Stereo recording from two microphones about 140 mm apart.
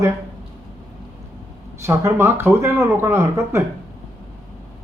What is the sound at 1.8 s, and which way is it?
Speech, 20° right (ahead or behind).